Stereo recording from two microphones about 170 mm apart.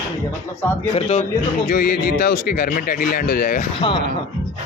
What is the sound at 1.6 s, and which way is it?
Speech, 60° left (ahead or behind).